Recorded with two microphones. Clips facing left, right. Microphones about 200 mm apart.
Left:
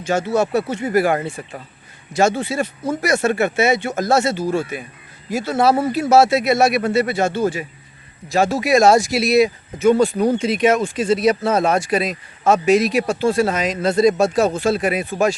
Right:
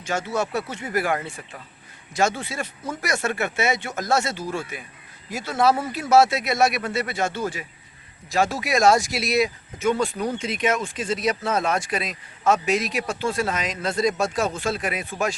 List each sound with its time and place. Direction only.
0.3 s speech: 30° left (ahead or behind)
9.0 s speech: 5° left (ahead or behind)
9.3 s speech: 30° left (ahead or behind)